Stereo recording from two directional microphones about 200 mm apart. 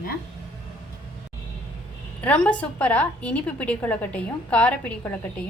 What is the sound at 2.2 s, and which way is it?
A woman's voice, 5° left (ahead or behind).